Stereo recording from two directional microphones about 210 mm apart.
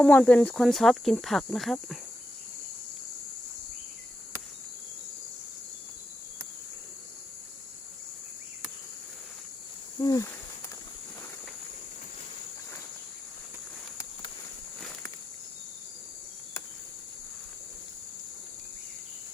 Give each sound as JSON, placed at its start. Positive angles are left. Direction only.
{"t": 0.0, "sound": "speech", "side_deg": 5}
{"t": 10.0, "sound": "cricket", "side_deg": 15}